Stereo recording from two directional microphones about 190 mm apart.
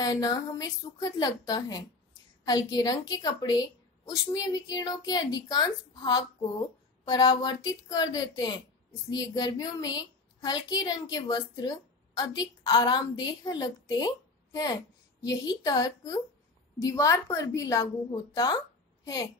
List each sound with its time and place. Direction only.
0.0 s a woman's voice: 20° left (ahead or behind)